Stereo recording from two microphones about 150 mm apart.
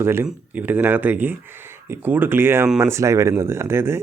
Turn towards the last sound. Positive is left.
turn(degrees=-15)  # may be behind; listen again after turning